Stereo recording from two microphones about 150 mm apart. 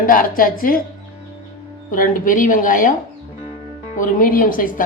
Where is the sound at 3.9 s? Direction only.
65° left (ahead or behind).